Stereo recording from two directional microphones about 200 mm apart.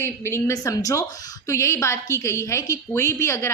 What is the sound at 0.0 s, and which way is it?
A woman's voice, 15° left (ahead or behind).